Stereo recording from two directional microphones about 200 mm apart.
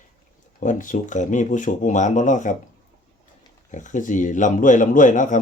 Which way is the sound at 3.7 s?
40° left (ahead or behind).